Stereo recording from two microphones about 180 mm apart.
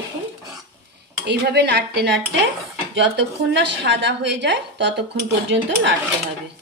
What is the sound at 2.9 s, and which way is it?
A woman's voice, 85° right.